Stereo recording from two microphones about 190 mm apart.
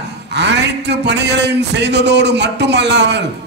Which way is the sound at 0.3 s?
65° right (ahead or behind).